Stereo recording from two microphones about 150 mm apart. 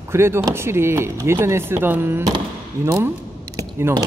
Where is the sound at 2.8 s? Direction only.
15° right (ahead or behind).